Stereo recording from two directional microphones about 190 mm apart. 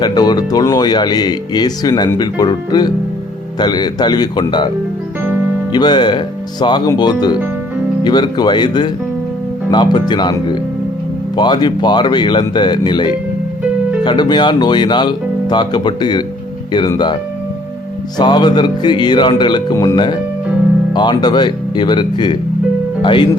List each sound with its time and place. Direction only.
0.0 s speech: 20° left (ahead or behind)
5.7 s speech: 20° left (ahead or behind)
18.2 s speech: 25° left (ahead or behind)